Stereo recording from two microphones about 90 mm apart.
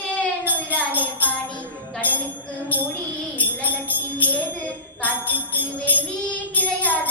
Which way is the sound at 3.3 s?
20° left (ahead or behind).